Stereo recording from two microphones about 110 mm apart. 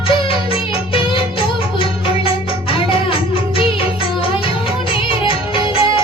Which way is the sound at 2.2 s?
55° left (ahead or behind).